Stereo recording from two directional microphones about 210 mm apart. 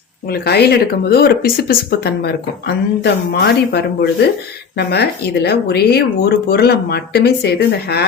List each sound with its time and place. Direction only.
0.3 s speech: 50° left (ahead or behind)